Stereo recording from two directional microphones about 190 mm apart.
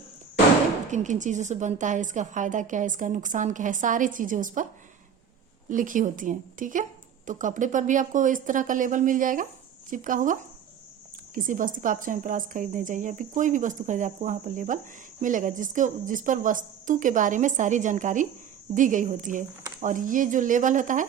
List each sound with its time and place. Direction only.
0.9 s a woman's voice: 40° right (ahead or behind)
5.6 s a woman's voice: 45° right (ahead or behind)
11.3 s a woman's voice: 45° right (ahead or behind)